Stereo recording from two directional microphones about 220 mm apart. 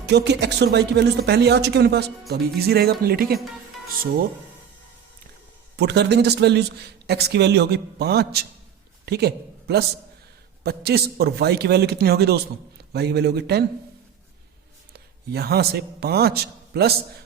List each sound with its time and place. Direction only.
0.0 s speech: 50° right (ahead or behind)
5.7 s a man's voice: 50° right (ahead or behind)
14.9 s a man's voice: 45° right (ahead or behind)